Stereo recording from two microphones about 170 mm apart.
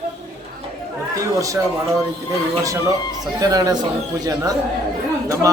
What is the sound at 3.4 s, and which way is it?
Speech, 20° right (ahead or behind).